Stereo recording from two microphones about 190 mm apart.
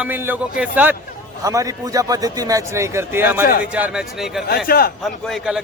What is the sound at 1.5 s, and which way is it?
A man's voice, 20° right (ahead or behind).